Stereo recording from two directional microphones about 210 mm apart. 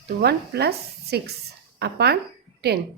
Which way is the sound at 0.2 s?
50° right (ahead or behind).